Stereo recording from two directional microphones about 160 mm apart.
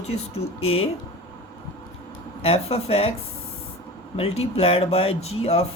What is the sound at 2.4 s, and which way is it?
Speech, 40° left (ahead or behind).